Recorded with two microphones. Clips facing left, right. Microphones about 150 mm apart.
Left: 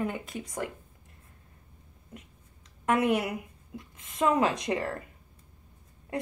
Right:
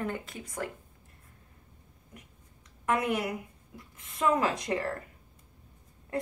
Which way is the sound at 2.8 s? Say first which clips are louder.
Left 3 dB; 20° left (ahead or behind).